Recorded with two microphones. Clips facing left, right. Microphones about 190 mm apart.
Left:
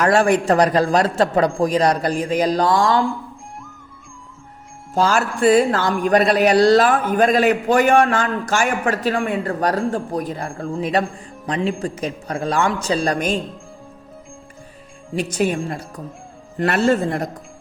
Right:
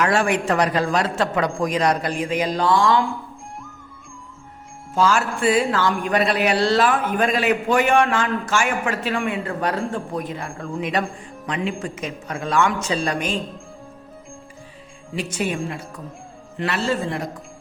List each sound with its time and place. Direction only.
0.0 s a man's voice: 35° left (ahead or behind)
4.9 s a man's voice: 40° left (ahead or behind)
15.1 s a man's voice: 40° left (ahead or behind)
16.6 s a man's voice: 50° left (ahead or behind)